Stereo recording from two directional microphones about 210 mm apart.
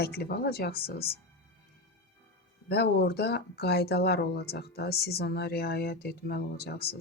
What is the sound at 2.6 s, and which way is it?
Speech, 50° left (ahead or behind).